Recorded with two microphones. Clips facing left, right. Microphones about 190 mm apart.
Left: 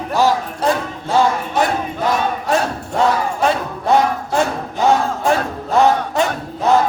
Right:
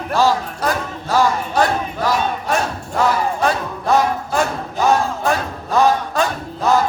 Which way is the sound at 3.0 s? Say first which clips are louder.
Left 1 dB; 25° left (ahead or behind).